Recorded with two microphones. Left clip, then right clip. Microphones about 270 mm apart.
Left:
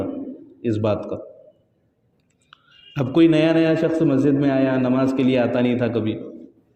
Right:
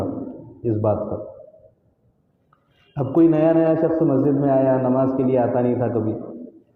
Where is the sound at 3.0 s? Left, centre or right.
Left.